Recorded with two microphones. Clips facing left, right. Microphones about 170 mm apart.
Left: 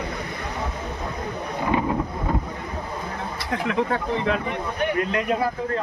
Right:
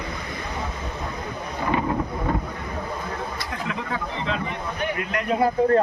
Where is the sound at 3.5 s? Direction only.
60° left (ahead or behind).